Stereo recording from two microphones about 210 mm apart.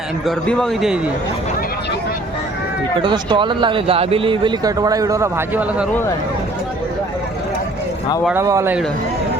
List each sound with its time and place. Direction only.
0.3 s a man's voice: 5° left (ahead or behind)
3.0 s speech: 20° right (ahead or behind)
8.2 s speech: 10° right (ahead or behind)